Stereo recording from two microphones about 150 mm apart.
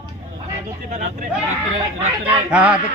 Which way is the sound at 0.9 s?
50° right (ahead or behind).